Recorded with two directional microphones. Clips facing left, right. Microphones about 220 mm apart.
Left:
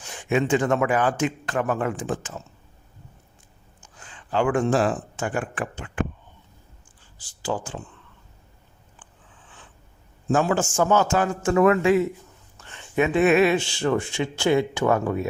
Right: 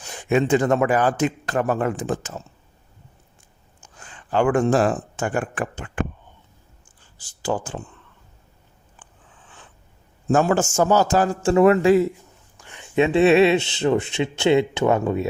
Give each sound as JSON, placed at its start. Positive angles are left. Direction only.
{"t": 0.1, "sound": "a man's voice", "side_deg": -40}
{"t": 4.0, "sound": "speech", "side_deg": -50}
{"t": 7.2, "sound": "speech", "side_deg": -45}
{"t": 10.3, "sound": "a man's voice", "side_deg": -45}
{"t": 12.5, "sound": "a sound", "side_deg": -15}
{"t": 13.0, "sound": "speech", "side_deg": -30}